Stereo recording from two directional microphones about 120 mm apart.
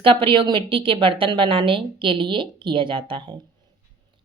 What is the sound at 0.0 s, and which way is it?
A woman's voice, 45° right (ahead or behind).